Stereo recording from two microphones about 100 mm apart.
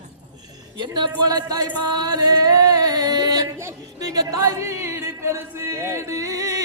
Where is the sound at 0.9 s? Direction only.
40° right (ahead or behind).